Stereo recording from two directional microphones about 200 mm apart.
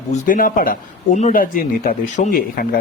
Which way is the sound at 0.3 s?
45° left (ahead or behind).